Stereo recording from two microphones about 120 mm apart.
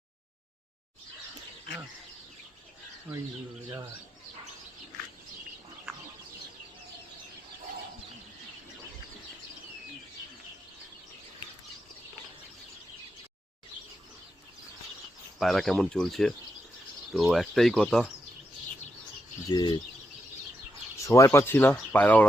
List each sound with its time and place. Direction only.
15.4 s speech: centre (ahead or behind)
19.5 s speech: 35° left (ahead or behind)
21.0 s speech: 25° left (ahead or behind)